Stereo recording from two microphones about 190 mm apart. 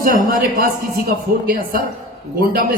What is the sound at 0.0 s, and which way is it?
A woman's voice, 45° right (ahead or behind).